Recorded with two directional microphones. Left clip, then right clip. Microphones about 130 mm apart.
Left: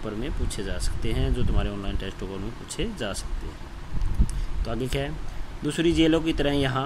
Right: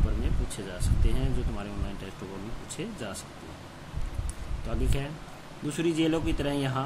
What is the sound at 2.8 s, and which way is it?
Speech, 50° left (ahead or behind).